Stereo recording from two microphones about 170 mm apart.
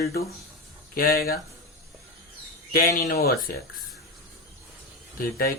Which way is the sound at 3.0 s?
60° left (ahead or behind).